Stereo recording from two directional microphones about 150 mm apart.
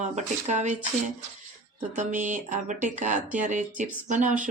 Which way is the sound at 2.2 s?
55° right (ahead or behind).